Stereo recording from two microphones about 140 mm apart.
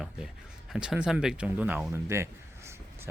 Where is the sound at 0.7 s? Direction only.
5° right (ahead or behind).